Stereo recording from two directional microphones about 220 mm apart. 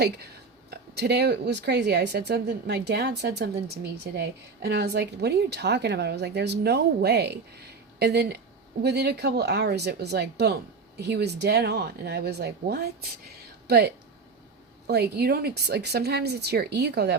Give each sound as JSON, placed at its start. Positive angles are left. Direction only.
{"t": 0.7, "sound": "speech", "side_deg": -45}